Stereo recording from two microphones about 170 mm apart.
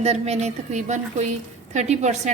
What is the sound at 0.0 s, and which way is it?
A woman's voice, 40° right (ahead or behind).